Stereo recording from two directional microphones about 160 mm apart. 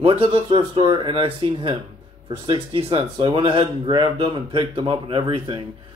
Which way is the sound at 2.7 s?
35° right (ahead or behind).